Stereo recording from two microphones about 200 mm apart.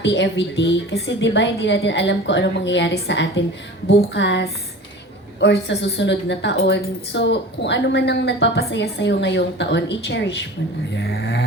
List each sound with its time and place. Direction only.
0.0 s a woman's voice: 60° left (ahead or behind)